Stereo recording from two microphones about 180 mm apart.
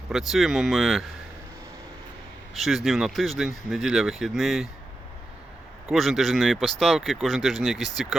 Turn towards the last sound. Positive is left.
turn(degrees=0)  # may be behind; listen again after turning